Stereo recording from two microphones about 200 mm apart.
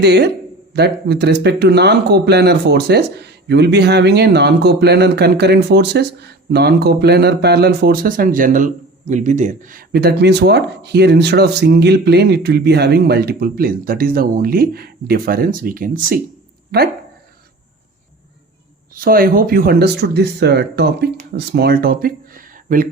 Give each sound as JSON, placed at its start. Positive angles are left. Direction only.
{"t": 0.0, "sound": "speech", "side_deg": -55}
{"t": 18.9, "sound": "speech", "side_deg": -45}